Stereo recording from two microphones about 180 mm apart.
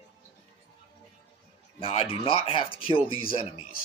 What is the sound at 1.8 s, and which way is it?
Speech, 30° left (ahead or behind).